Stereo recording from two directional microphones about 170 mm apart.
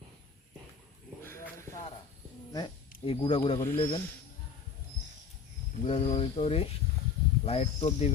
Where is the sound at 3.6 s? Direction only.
15° left (ahead or behind).